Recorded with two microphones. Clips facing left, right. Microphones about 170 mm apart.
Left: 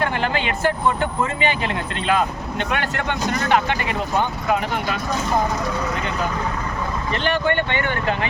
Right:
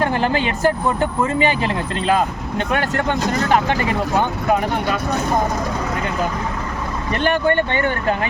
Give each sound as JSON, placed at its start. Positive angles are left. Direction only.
{"t": 0.0, "sound": "speech", "side_deg": -40}
{"t": 7.3, "sound": "speech", "side_deg": -40}